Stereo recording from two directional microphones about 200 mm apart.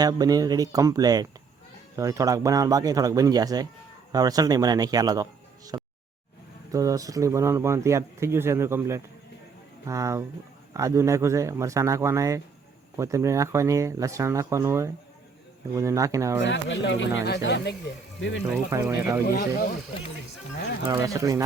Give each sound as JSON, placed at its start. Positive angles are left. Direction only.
{"t": 0.0, "sound": "speech", "side_deg": -20}
{"t": 16.4, "sound": "speech", "side_deg": 65}
{"t": 18.7, "sound": "speech", "side_deg": -10}
{"t": 19.2, "sound": "speech", "side_deg": 50}
{"t": 20.9, "sound": "speech", "side_deg": -15}